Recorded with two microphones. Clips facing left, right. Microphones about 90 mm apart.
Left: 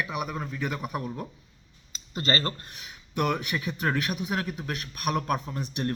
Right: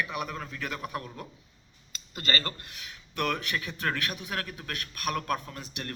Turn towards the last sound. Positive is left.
turn(degrees=20)  # may be behind; listen again after turning